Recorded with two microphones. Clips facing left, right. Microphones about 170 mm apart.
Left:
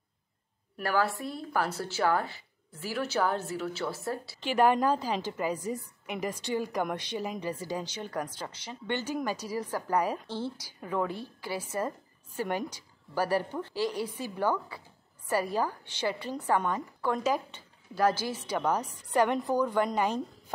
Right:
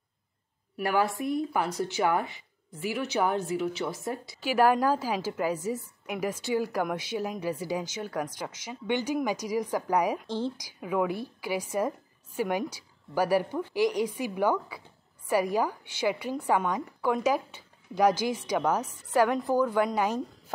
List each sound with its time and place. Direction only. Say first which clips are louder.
0.8 s a woman's voice: right 2 dB; 20° right (ahead or behind)
4.5 s a woman's voice: right 1 dB; 5° right (ahead or behind)